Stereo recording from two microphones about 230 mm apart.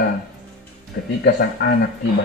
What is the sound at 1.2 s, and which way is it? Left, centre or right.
Speech, left.